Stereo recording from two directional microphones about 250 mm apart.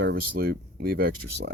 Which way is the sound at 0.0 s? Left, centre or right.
Right.